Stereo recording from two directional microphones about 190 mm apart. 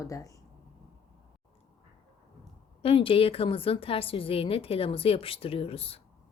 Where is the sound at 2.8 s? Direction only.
30° left (ahead or behind).